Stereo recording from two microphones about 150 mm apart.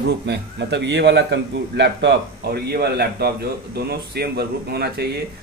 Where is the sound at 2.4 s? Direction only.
90° right.